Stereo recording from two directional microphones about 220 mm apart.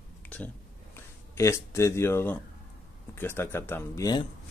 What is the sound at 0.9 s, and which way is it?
Speech, 10° left (ahead or behind).